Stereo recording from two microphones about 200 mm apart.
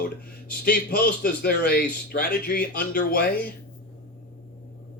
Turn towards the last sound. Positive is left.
turn(degrees=45)  # may be behind; listen again after turning